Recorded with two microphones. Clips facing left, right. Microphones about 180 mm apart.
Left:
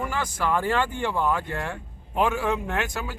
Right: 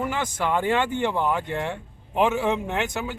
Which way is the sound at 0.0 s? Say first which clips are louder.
Right 1 dB; 20° right (ahead or behind).